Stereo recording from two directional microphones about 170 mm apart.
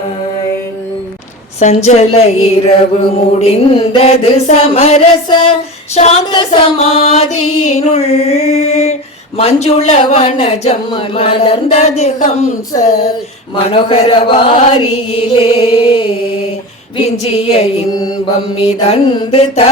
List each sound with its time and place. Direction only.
1.5 s speech: 40° left (ahead or behind)
17.1 s speech: 35° left (ahead or behind)